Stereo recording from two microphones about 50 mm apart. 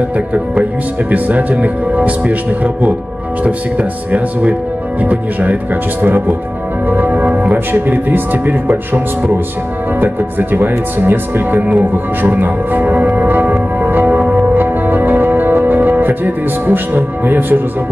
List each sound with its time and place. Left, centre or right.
1.1 s speech: right
6.0 s speech: right
6.9 s music: right
7.5 s speech: right
13.1 s music: right